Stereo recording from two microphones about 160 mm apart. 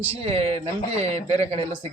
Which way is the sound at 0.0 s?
35° right (ahead or behind).